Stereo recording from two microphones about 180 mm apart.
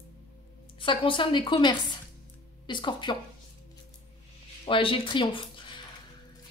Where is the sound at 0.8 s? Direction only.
25° left (ahead or behind).